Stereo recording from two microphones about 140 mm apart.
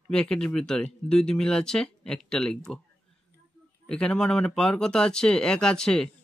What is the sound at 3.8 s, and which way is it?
Speech, 5° left (ahead or behind).